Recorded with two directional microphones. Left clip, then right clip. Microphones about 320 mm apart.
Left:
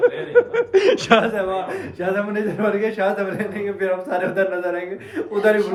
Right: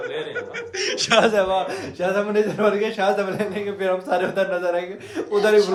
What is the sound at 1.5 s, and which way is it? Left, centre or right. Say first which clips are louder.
A man's voice: right 1 dB; centre.